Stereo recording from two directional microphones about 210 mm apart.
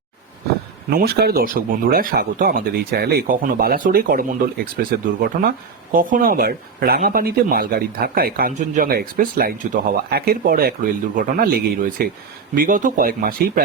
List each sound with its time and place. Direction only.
0.9 s speech: 50° right (ahead or behind)